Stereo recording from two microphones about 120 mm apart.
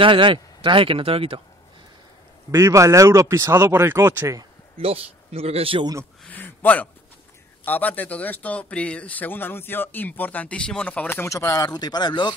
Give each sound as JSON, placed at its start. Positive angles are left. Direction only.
{"t": 0.0, "sound": "speech", "side_deg": -45}
{"t": 2.5, "sound": "speech", "side_deg": -25}
{"t": 4.7, "sound": "speech", "side_deg": -55}
{"t": 6.2, "sound": "a man's voice", "side_deg": 15}